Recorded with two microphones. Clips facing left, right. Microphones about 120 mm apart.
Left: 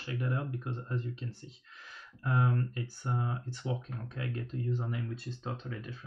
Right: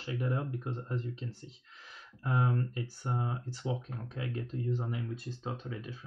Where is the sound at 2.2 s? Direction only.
25° right (ahead or behind); by 5.9 s 10° right (ahead or behind).